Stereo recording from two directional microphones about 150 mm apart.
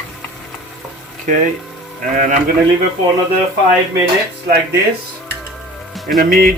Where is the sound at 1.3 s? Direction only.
60° right (ahead or behind).